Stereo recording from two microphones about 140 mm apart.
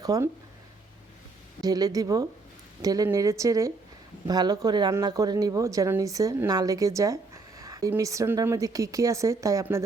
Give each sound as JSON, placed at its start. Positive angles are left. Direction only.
{"t": 0.0, "sound": "speech", "side_deg": -25}
{"t": 1.6, "sound": "speech", "side_deg": -25}